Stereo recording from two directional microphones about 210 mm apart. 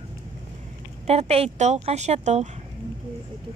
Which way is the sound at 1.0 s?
30° right (ahead or behind).